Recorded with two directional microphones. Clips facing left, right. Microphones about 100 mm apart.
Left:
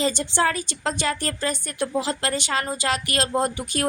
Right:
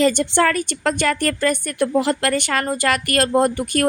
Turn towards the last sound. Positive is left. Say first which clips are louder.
# right 6 dB
turn(degrees=-50)  # may be behind; listen again after turning